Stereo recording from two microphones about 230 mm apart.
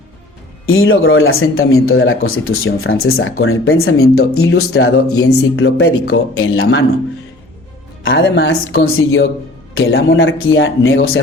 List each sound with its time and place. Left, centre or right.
0.7 s speech: left
8.0 s speech: left